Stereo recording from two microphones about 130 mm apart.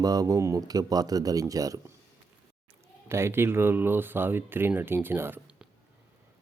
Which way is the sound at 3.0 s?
20° right (ahead or behind).